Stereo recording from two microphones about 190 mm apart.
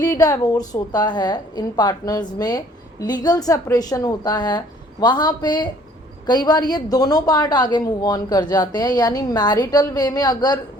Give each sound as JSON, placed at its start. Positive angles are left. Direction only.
{"t": 0.0, "sound": "a woman's voice", "side_deg": 20}